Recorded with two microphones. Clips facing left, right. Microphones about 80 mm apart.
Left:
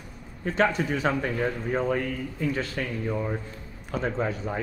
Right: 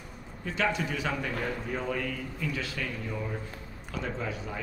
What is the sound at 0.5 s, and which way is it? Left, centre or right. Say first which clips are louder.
A man's voice: left 6 dB; left.